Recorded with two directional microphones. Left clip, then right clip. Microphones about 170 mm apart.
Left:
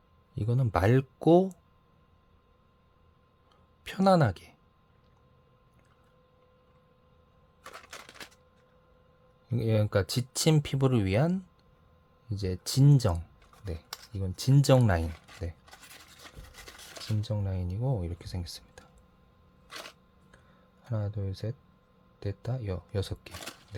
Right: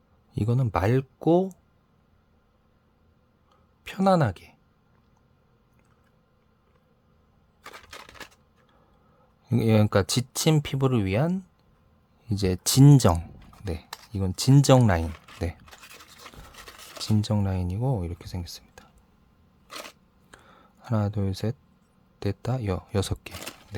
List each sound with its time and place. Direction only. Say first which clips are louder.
0.3 s speech: right 5 dB; 25° right (ahead or behind)
0.7 s speech: even; 5° right (ahead or behind)
3.8 s speech: right 2 dB; 10° right (ahead or behind)
9.5 s speech: right 6 dB; 30° right (ahead or behind); by 11.4 s 15° right (ahead or behind)
12.3 s speech: right 8 dB; 40° right (ahead or behind); by 15.1 s 15° right (ahead or behind)
17.0 s speech: right 9 dB; 40° right (ahead or behind); by 18.9 s 15° right (ahead or behind)
19.6 s a sound: right 4 dB; 30° right (ahead or behind)
20.8 s speech: right 9 dB; 40° right (ahead or behind)